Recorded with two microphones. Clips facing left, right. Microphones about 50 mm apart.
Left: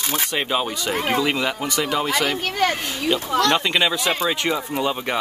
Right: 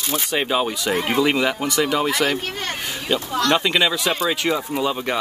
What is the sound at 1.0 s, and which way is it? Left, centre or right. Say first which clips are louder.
Speech: right 2 dB; centre.